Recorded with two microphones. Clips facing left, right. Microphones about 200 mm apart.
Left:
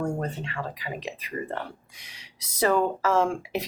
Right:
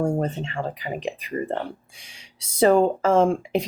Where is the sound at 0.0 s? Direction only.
25° right (ahead or behind).